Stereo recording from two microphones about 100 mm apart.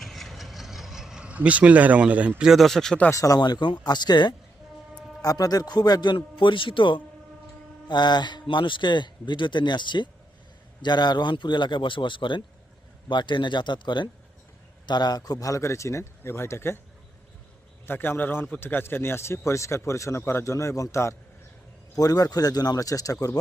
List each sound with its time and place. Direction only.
0.0 s vehicle: centre (ahead or behind)
3.1 s a man's voice: 35° left (ahead or behind)
17.8 s a man's voice: 20° left (ahead or behind)